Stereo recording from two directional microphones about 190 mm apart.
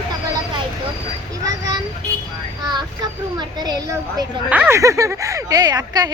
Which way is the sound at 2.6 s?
20° right (ahead or behind).